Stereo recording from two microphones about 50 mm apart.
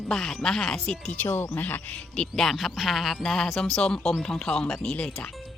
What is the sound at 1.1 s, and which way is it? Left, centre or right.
Speech, left.